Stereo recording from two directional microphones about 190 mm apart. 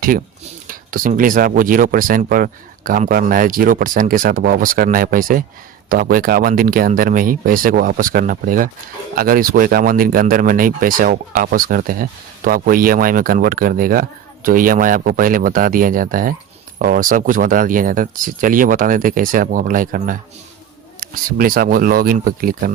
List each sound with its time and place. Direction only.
0.7 s speech: 45° right (ahead or behind)